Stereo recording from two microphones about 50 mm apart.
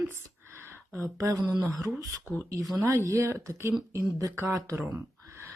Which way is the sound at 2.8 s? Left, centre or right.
Right.